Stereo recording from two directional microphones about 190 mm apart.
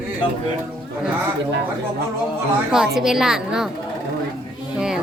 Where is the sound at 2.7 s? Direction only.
5° right (ahead or behind).